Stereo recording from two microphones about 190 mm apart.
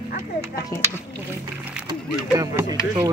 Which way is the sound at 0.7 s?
10° left (ahead or behind).